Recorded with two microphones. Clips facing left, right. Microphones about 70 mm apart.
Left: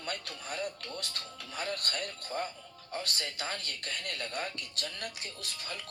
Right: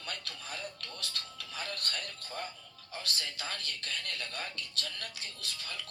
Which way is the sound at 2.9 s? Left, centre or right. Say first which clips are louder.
Left 3 dB; left.